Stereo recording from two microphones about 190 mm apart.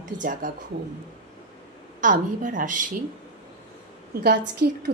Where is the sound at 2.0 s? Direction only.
45° right (ahead or behind).